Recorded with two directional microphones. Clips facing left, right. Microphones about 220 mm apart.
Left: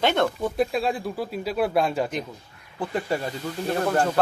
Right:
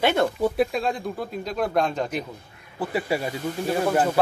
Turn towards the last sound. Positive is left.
turn(degrees=-5)  # may be behind; listen again after turning